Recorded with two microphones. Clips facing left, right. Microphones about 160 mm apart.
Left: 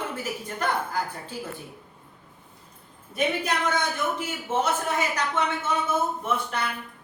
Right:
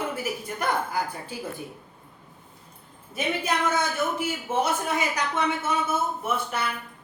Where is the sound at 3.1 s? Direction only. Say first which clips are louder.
Left 1 dB; 5° right (ahead or behind).